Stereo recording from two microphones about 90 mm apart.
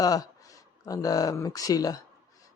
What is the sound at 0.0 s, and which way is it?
Speech, 40° left (ahead or behind).